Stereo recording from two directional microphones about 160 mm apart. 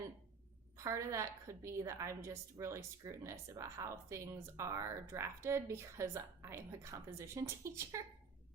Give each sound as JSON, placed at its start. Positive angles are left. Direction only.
{"t": 0.9, "sound": "a woman's voice", "side_deg": -20}